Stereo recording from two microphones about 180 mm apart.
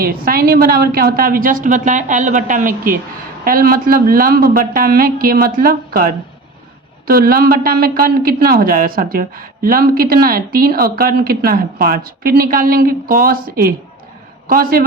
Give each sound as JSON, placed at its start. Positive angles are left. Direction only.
{"t": 0.0, "sound": "a man's voice", "side_deg": -55}